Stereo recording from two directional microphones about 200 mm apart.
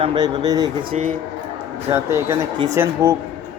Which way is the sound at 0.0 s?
25° right (ahead or behind).